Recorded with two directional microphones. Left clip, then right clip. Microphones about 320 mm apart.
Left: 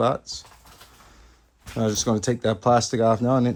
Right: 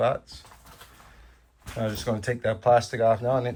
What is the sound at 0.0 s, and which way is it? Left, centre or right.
Speech, centre.